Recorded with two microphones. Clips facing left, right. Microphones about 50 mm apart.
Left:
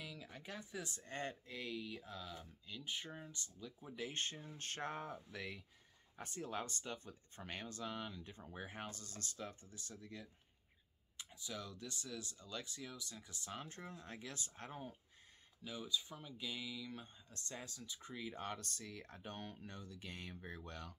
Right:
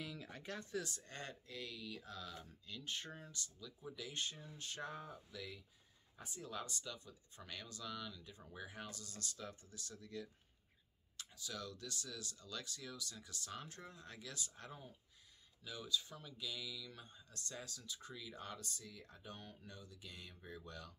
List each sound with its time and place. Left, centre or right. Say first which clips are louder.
0.0 s speech: right 2 dB; centre
0.8 s speech: left 4 dB; left
15.6 s speech: even; left